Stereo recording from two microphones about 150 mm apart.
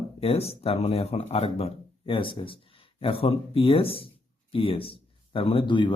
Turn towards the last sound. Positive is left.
turn(degrees=30)  # may be behind; listen again after turning